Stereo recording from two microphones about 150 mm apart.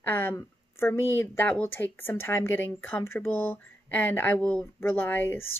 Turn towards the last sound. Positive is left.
turn(degrees=15)  # may be behind; listen again after turning